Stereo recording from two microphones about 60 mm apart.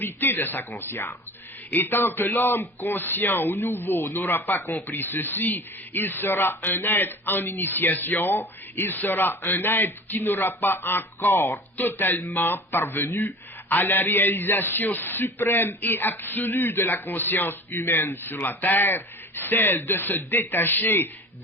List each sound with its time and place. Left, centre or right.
0.0 s a man's voice: left